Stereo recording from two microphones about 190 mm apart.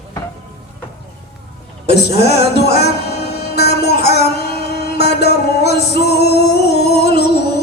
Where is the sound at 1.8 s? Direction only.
60° left (ahead or behind).